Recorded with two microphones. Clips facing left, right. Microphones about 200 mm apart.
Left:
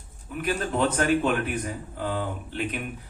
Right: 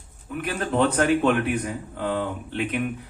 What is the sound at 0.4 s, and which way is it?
A man's voice, 60° right (ahead or behind).